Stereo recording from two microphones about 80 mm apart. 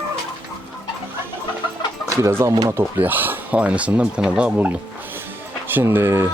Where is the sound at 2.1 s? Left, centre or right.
Right; by 4.7 s centre.